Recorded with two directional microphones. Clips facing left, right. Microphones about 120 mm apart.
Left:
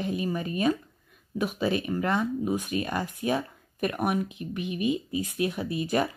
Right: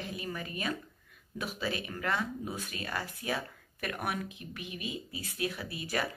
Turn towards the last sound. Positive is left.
turn(degrees=20)  # may be behind; listen again after turning